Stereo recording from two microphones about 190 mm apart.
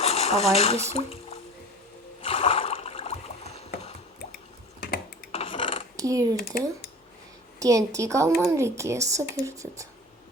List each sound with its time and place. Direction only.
0.0 s a sound: 35° left (ahead or behind)
0.5 s speech: 30° left (ahead or behind)
2.2 s a sound: 30° left (ahead or behind)
4.8 s typing: 55° left (ahead or behind)
5.3 s dishes: 30° left (ahead or behind)
6.0 s speech: 20° right (ahead or behind)
7.6 s speech: 15° right (ahead or behind)